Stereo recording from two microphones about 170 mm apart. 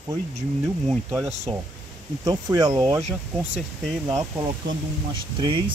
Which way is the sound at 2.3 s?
25° right (ahead or behind).